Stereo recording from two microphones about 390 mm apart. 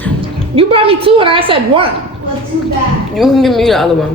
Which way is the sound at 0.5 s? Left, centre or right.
Centre.